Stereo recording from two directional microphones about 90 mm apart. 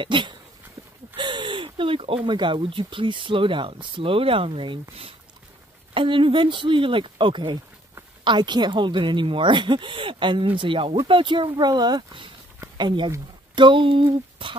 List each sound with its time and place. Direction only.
0.0 s speech: 65° right (ahead or behind)
1.1 s a sound: 60° right (ahead or behind); by 2.1 s 85° right
2.2 s speech: 65° right (ahead or behind); by 4.7 s 85° right
5.9 s speech: 70° right (ahead or behind); by 12.3 s 50° right (ahead or behind)
12.7 s speech: 60° right (ahead or behind)